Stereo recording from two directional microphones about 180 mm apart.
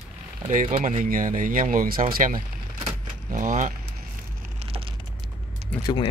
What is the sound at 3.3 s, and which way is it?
Speech, 45° right (ahead or behind).